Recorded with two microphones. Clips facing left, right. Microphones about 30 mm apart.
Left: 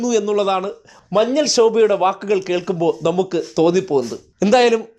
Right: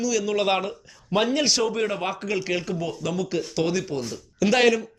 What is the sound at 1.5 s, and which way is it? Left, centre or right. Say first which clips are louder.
Speech: left 11 dB; centre.